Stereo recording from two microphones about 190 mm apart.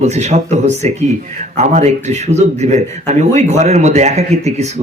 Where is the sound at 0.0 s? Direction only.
35° right (ahead or behind).